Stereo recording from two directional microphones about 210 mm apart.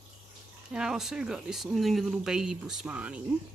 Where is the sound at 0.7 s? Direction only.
5° right (ahead or behind).